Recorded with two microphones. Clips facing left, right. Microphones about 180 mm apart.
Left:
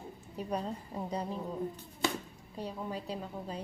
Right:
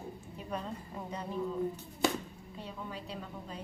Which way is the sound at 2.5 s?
40° left (ahead or behind).